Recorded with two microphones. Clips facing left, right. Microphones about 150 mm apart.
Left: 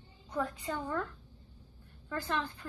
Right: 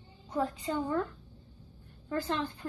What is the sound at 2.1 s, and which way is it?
Speech, 20° right (ahead or behind).